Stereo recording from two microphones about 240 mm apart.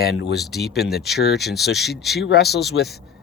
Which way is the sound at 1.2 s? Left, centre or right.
Left.